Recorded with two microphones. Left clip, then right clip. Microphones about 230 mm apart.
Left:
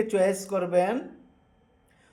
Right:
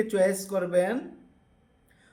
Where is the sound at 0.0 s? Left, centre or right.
Centre.